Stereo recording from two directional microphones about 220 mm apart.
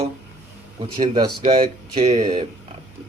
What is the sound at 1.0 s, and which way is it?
A man's voice, 20° right (ahead or behind).